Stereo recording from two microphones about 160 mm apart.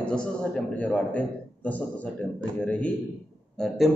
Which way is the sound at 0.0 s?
5° left (ahead or behind).